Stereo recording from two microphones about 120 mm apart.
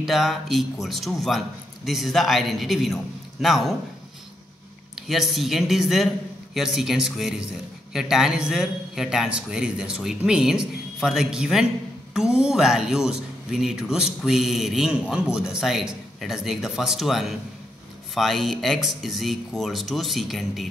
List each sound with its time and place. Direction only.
0.0 s speech: centre (ahead or behind)
4.9 s speech: 5° right (ahead or behind)